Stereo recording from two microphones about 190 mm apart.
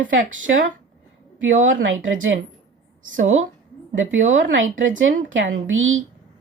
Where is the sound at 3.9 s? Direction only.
85° right.